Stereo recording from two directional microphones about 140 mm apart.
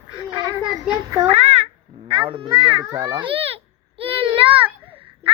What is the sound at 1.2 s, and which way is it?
Babbling, 50° right (ahead or behind).